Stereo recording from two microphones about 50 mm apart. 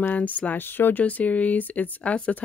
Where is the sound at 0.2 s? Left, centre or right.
Left.